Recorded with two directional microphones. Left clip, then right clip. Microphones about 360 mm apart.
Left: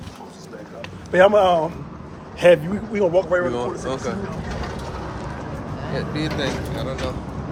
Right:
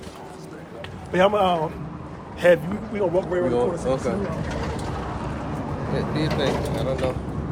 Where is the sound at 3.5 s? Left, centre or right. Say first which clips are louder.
Right 3 dB; centre.